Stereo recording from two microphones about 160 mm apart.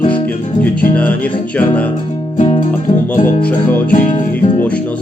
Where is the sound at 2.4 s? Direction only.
35° left (ahead or behind).